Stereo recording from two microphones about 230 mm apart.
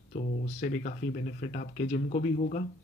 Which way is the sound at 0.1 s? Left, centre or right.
Left.